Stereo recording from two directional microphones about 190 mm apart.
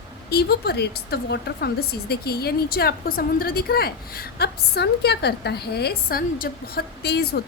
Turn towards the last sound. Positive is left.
turn(degrees=60)  # may be behind; listen again after turning